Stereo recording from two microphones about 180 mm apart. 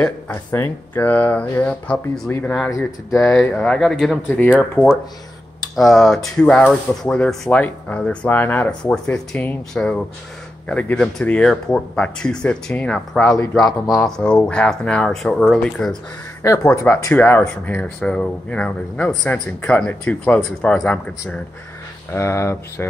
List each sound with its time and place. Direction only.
0.0 s speech: 10° left (ahead or behind)
13.4 s speech: 20° left (ahead or behind)
13.8 s speech: centre (ahead or behind)
16.4 s speech: 15° left (ahead or behind)